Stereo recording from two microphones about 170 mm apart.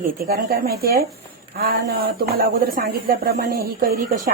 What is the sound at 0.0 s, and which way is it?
Speech, 55° right (ahead or behind).